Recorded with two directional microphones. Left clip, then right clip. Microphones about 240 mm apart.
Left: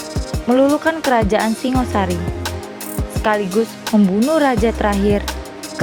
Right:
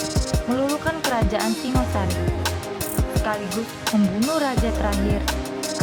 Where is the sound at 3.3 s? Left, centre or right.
Left.